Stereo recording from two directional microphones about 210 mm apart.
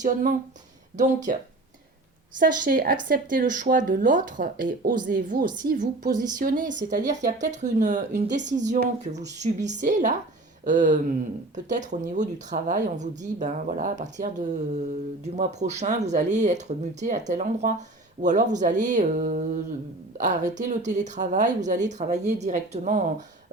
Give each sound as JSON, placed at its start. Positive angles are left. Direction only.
{"t": 0.0, "sound": "speech", "side_deg": -40}
{"t": 2.4, "sound": "speech", "side_deg": -40}
{"t": 15.5, "sound": "speech", "side_deg": -35}